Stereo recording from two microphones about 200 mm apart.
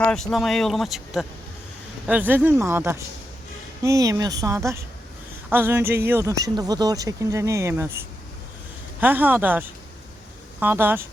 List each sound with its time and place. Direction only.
0.0 s speech: 5° left (ahead or behind)